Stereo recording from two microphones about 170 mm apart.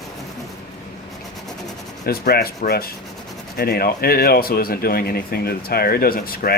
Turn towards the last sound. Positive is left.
turn(degrees=60)  # may be behind; listen again after turning